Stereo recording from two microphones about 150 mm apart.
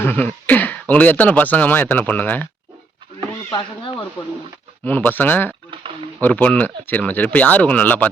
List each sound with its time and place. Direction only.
0.0 s speech: 10° left (ahead or behind)
3.5 s speech: 35° left (ahead or behind)
4.9 s speech: 10° left (ahead or behind)